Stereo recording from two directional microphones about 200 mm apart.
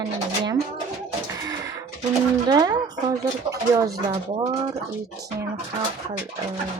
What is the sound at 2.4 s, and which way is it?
Speech, 20° right (ahead or behind).